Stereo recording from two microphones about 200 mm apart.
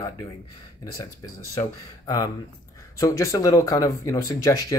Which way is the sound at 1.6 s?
20° left (ahead or behind).